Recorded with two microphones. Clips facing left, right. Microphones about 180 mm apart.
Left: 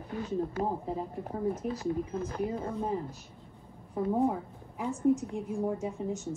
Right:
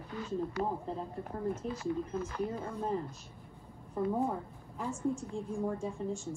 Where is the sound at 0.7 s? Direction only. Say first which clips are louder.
Left 3 dB; 10° left (ahead or behind).